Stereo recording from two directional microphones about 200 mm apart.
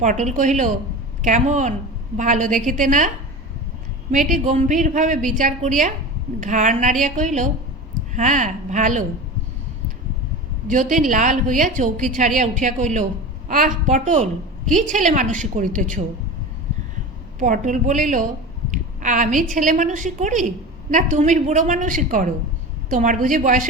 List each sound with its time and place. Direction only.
0.0 s a woman's voice: 35° right (ahead or behind)
4.1 s a woman's voice: 40° right (ahead or behind)
10.7 s a woman's voice: 40° right (ahead or behind)
17.4 s a woman's voice: 40° right (ahead or behind)